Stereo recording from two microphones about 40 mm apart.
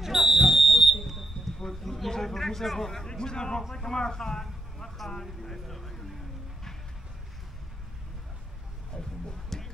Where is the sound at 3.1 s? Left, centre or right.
Centre.